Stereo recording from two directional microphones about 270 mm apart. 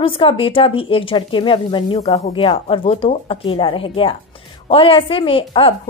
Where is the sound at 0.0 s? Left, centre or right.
Centre.